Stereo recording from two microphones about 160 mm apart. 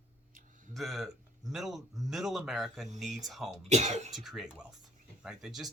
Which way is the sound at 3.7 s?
45° right (ahead or behind).